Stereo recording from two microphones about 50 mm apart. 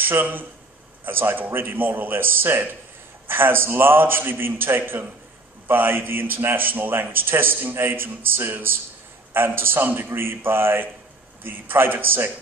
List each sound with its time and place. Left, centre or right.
0.0 s a man's voice: right